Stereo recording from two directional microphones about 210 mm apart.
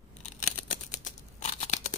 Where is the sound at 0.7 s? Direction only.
35° left (ahead or behind).